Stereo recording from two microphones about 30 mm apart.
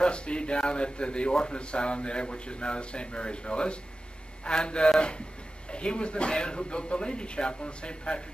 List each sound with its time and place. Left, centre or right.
0.0 s a man's voice: left